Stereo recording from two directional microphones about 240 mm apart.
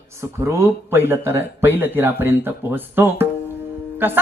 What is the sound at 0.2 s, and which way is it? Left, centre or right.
Speech, centre.